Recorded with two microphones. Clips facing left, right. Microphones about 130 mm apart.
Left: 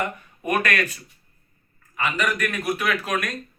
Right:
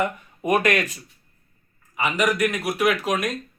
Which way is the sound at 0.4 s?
20° right (ahead or behind).